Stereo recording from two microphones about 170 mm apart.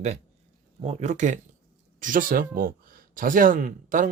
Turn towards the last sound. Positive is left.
turn(degrees=-50)  # may be behind; listen again after turning